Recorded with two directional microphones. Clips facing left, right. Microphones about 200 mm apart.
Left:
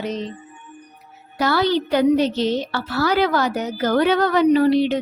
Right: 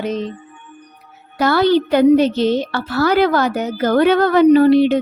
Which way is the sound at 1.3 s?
55° right (ahead or behind).